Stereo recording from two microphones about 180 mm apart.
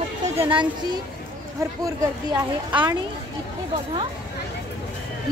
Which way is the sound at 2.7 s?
25° right (ahead or behind).